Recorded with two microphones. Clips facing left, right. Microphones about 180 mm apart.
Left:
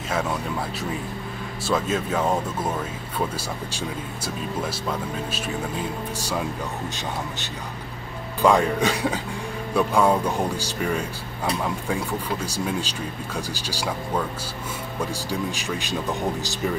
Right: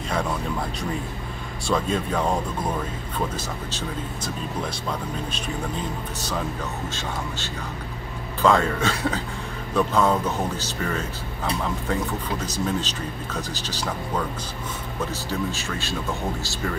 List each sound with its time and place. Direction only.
1.7 s speech: 5° left (ahead or behind)
3.3 s speech: 10° left (ahead or behind)
8.4 s speech: 15° left (ahead or behind)
15.2 s speech: 15° left (ahead or behind)